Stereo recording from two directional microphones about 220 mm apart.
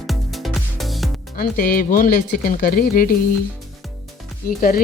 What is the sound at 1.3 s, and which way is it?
Speech, 40° left (ahead or behind).